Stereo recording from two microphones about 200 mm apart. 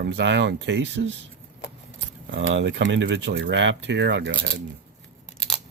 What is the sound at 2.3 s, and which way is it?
Speech, 65° right (ahead or behind).